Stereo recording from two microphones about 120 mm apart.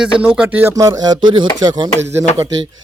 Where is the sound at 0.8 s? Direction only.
30° right (ahead or behind).